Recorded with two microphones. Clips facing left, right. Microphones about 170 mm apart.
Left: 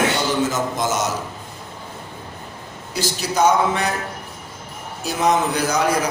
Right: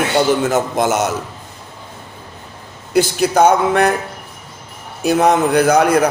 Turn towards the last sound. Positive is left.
turn(degrees=-60)  # may be behind; listen again after turning